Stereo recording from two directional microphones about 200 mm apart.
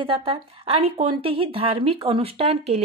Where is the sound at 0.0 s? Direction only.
25° right (ahead or behind).